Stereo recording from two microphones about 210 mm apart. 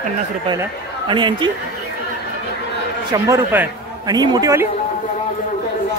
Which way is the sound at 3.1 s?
10° right (ahead or behind).